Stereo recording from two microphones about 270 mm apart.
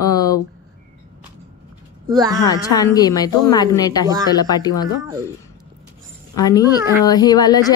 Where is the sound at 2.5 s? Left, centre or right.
Centre.